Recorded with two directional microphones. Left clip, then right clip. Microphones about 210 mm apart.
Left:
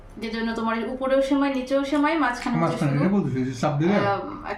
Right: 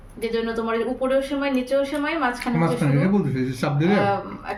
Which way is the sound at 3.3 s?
45° right (ahead or behind).